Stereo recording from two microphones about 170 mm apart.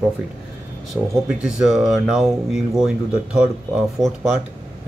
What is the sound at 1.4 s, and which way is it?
Speech, 5° right (ahead or behind).